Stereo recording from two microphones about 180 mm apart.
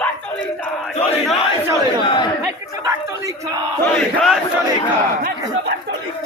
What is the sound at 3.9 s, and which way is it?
Battle cry, centre (ahead or behind).